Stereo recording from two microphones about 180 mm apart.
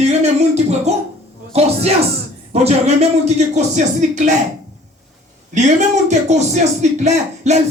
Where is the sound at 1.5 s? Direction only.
35° right (ahead or behind).